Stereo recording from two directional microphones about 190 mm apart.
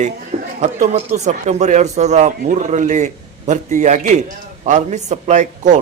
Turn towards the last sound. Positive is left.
turn(degrees=-40)  # may be behind; listen again after turning